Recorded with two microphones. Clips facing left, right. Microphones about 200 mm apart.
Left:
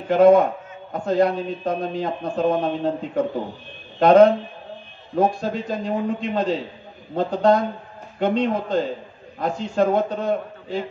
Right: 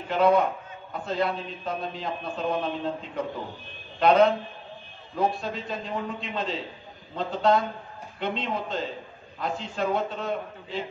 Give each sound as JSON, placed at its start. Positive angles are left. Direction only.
{"t": 0.1, "sound": "a man's voice", "side_deg": 50}